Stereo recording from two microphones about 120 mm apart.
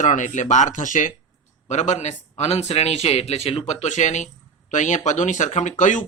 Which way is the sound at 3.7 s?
80° left.